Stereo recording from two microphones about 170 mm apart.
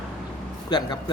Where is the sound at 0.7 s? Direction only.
25° left (ahead or behind).